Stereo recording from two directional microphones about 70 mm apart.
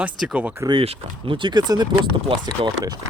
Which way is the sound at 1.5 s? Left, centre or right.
Right.